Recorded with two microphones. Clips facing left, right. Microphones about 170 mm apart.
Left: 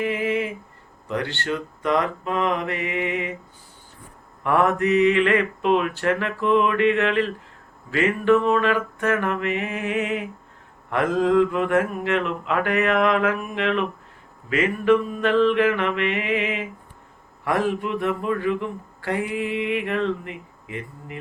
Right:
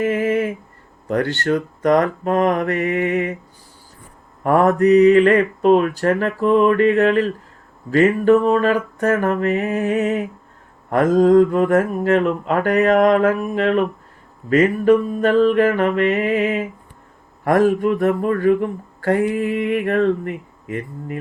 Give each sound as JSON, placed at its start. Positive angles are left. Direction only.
{"t": 0.0, "sound": "a sound", "side_deg": -45}
{"t": 1.0, "sound": "speech", "side_deg": -45}
{"t": 4.4, "sound": "speech", "side_deg": -40}